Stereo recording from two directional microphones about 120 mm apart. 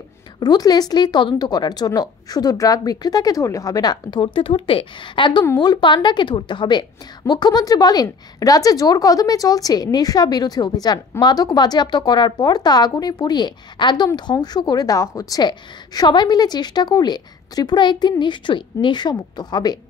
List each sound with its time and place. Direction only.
0.4 s a woman's voice: 35° left (ahead or behind)